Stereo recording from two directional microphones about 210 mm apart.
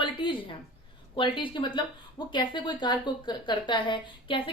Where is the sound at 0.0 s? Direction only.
20° left (ahead or behind).